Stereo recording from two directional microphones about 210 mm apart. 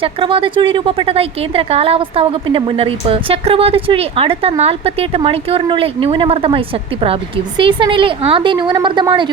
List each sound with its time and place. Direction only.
0.0 s a woman's voice: 25° right (ahead or behind)